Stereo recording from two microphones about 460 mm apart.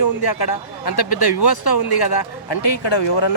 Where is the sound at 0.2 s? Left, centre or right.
Left.